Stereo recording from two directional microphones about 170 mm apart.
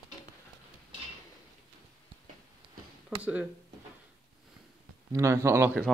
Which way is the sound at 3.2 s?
10° right (ahead or behind).